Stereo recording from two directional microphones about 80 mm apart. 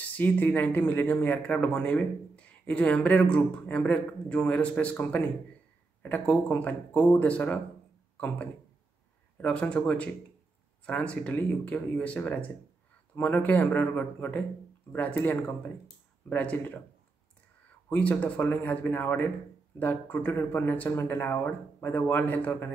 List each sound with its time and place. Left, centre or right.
0.1 s speech: left
9.4 s speech: centre
17.8 s speech: centre